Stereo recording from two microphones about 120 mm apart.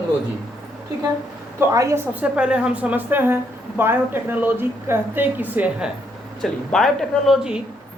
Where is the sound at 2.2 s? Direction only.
10° right (ahead or behind).